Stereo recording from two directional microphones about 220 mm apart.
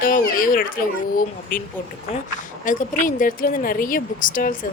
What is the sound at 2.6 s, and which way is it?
A woman's voice, 35° left (ahead or behind).